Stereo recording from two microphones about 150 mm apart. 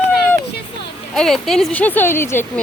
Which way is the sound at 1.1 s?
5° left (ahead or behind).